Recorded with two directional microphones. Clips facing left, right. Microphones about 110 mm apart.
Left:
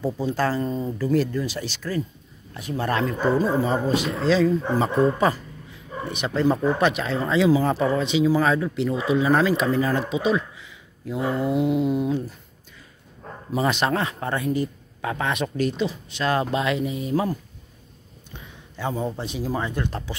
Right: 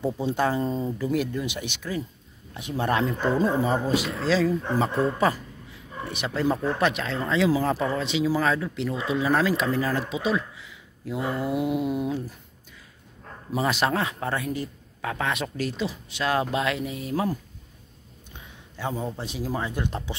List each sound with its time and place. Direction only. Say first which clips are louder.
0.0 s speech: left 1 dB; 20° right (ahead or behind)
3.6 s a man's voice: left 2 dB; 5° right (ahead or behind)
4.6 s a man's voice: left 2 dB; 15° left (ahead or behind)
6.0 s a man's voice: left 4 dB; centre (ahead or behind)
6.5 s a man's voice: left 3 dB; 10° left (ahead or behind); by 12.4 s 10° right (ahead or behind)
13.5 s a man's voice: left 2 dB; 5° right (ahead or behind)
18.8 s a man's voice: left 3 dB; centre (ahead or behind)
19.7 s speech: left 1 dB; 15° right (ahead or behind)